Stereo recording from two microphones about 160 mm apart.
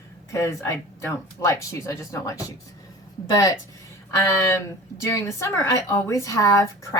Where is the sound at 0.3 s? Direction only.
20° left (ahead or behind).